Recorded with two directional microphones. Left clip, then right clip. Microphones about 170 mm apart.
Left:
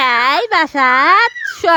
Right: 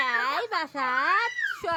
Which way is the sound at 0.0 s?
45° left (ahead or behind).